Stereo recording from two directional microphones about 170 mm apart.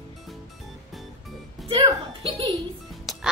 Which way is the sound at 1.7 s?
30° right (ahead or behind).